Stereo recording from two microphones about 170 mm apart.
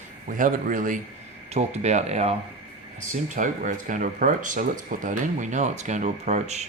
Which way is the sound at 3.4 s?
50° right (ahead or behind).